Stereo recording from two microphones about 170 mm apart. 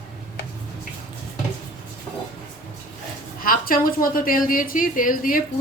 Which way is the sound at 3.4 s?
55° left (ahead or behind).